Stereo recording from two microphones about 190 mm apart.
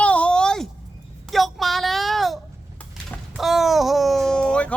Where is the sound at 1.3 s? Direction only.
Centre (ahead or behind).